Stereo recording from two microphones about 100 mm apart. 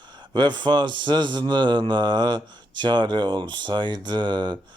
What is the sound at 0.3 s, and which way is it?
Speech, 50° right (ahead or behind).